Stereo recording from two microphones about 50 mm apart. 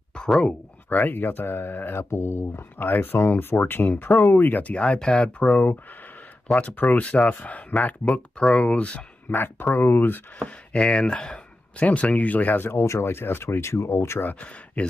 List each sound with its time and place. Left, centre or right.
0.8 s speech: left
5.4 s speech: left
9.3 s speech: left
10.4 s speech: left
12.7 s speech: left
13.0 s speech: left